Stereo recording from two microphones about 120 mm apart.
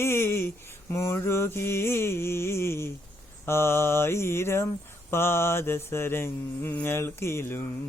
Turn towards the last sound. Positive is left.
turn(degrees=20)  # may be behind; listen again after turning